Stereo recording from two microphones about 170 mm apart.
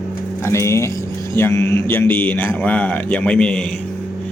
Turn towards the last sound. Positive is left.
turn(degrees=5)  # may be behind; listen again after turning